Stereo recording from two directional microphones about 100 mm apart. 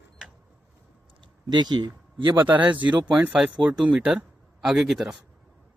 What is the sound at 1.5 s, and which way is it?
Speech, 45° right (ahead or behind).